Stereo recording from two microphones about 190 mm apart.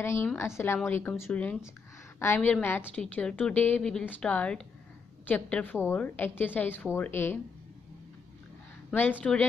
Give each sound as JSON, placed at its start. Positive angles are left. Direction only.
{"t": 0.0, "sound": "a woman's voice", "side_deg": 15}
{"t": 8.9, "sound": "a woman's voice", "side_deg": 10}